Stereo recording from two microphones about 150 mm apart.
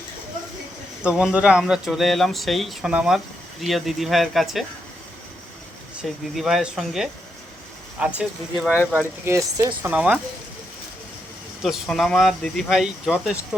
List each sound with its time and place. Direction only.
1.0 s speech: 5° right (ahead or behind)
6.0 s speech: centre (ahead or behind); by 9.9 s 20° right (ahead or behind)
9.9 s speech: 10° right (ahead or behind)
11.6 s speech: centre (ahead or behind)